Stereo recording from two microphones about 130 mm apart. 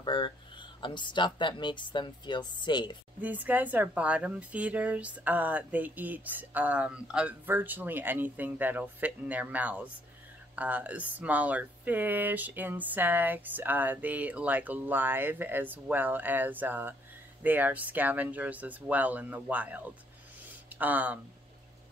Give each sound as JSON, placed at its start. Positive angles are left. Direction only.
{"t": 0.0, "sound": "speech", "side_deg": 35}
{"t": 3.2, "sound": "speech", "side_deg": -10}